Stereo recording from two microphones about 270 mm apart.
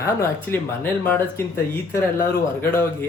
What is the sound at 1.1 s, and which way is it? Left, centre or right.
Speech, centre.